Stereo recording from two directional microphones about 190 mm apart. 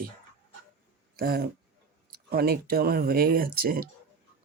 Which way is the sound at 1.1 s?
55° right (ahead or behind).